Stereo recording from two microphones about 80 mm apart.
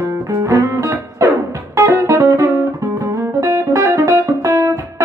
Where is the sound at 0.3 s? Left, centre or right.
Right.